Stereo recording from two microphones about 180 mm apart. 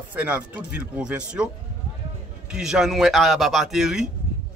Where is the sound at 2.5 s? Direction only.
Centre (ahead or behind).